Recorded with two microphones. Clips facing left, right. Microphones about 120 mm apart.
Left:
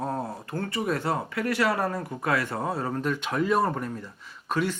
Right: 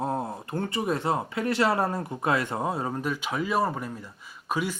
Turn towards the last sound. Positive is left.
turn(degrees=-10)  # may be behind; listen again after turning